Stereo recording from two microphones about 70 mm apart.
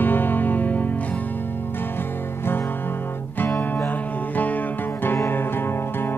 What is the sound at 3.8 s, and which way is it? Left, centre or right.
Music, left.